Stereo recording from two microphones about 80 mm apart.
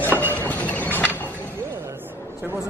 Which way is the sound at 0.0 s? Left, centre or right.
Left.